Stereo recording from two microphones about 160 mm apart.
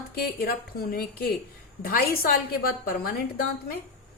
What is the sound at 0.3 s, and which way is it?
A woman's voice, 70° left (ahead or behind).